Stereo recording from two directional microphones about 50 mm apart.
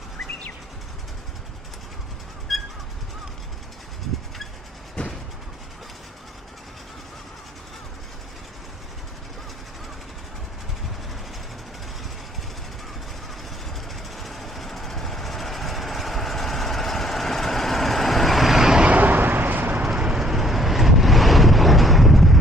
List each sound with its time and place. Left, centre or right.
2.5 s bird: centre
5.0 s vehicle: left
14.1 s vehicle: centre
18.9 s vehicle: right
19.8 s vehicle: centre
20.2 s vehicle: centre